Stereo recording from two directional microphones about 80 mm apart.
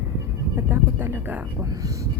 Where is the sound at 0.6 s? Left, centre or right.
Right.